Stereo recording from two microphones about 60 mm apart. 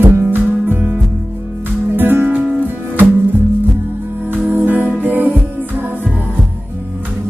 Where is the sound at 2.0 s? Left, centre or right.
Right.